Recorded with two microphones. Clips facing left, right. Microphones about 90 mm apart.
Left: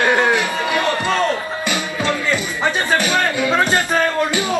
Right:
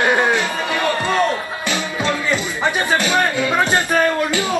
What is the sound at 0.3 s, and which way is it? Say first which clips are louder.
Music: left 1 dB; 20° left (ahead or behind).